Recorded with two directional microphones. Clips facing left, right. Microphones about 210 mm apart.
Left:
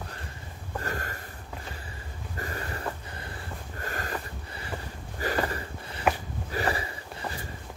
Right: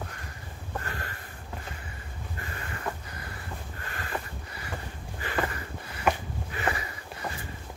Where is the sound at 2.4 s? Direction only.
35° left (ahead or behind).